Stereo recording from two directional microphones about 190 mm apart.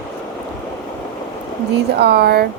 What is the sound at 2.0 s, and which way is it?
Speech, 60° right (ahead or behind).